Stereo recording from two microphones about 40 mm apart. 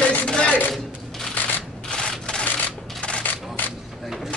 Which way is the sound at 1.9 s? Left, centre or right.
Left.